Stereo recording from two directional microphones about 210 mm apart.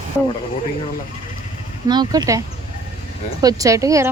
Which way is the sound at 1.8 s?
20° right (ahead or behind).